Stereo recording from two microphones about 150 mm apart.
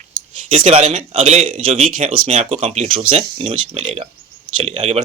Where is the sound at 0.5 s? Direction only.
40° right (ahead or behind).